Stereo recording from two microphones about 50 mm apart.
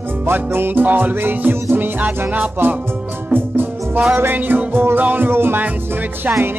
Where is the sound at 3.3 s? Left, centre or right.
Right.